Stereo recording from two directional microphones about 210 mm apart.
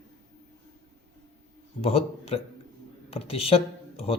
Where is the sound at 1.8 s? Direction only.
30° left (ahead or behind).